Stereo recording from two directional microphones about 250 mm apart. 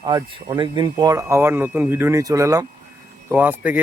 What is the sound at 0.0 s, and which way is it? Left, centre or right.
Speech, centre.